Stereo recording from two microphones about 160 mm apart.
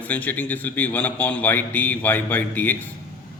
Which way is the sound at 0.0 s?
10° left (ahead or behind).